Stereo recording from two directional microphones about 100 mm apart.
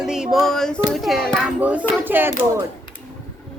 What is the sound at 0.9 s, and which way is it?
Speech, centre (ahead or behind).